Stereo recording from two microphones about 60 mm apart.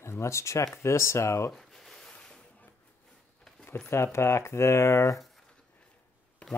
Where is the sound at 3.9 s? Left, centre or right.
Left.